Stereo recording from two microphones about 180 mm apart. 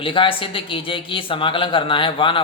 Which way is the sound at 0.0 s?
30° left (ahead or behind).